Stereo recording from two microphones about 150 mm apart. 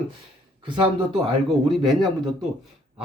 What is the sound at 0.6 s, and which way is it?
Speech, 35° right (ahead or behind).